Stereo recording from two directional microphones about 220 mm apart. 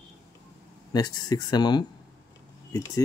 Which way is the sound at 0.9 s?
20° left (ahead or behind).